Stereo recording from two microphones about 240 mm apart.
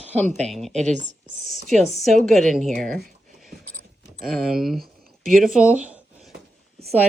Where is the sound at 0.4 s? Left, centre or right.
Centre.